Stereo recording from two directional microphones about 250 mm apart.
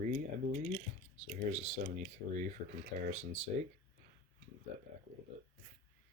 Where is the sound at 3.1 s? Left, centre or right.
Right.